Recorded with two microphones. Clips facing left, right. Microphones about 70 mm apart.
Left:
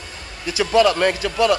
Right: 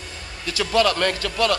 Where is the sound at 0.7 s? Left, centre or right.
Centre.